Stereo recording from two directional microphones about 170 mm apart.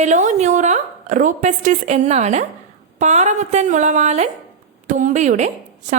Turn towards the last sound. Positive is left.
turn(degrees=-45)  # may be behind; listen again after turning